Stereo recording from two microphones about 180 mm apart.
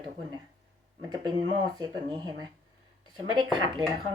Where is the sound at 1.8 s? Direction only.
20° right (ahead or behind).